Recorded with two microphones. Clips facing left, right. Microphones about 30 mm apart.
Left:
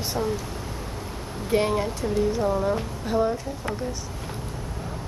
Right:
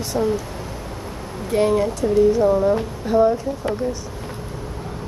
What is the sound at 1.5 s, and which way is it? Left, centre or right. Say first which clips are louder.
Speech: right 5 dB; centre.